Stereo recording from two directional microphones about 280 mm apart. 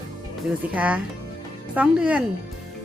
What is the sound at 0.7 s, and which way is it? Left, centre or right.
Speech, centre.